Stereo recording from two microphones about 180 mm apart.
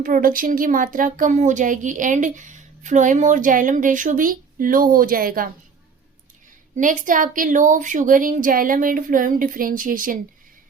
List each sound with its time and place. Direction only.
0.0 s speech: 50° right (ahead or behind)
6.7 s speech: 45° right (ahead or behind)